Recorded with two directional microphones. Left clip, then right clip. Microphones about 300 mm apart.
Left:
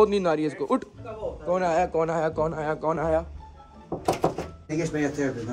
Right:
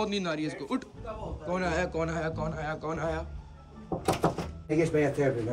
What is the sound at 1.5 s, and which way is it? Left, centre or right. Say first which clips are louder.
Speech: left 6 dB; centre.